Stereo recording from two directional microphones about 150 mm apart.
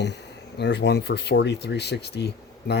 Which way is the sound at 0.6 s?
90° left.